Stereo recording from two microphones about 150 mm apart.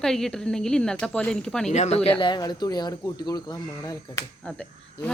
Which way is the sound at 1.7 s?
45° left (ahead or behind).